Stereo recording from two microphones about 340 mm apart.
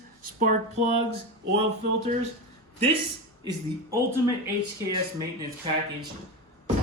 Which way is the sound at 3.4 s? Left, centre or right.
Centre.